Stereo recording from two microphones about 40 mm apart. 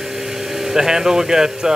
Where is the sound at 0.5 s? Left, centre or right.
Centre.